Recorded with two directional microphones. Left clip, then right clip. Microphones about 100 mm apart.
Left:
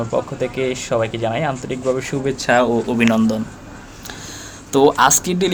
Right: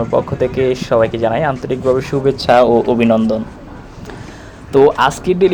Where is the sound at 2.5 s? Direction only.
35° right (ahead or behind).